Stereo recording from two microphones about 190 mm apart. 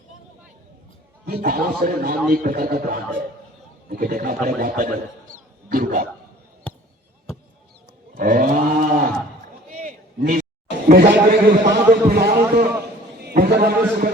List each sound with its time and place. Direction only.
1.2 s a man's voice: 50° right (ahead or behind)
8.1 s a sound: 45° right (ahead or behind)
10.8 s a man's voice: 55° right (ahead or behind)